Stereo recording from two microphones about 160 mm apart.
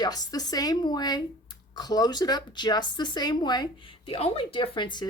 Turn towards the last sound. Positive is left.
turn(degrees=30)  # may be behind; listen again after turning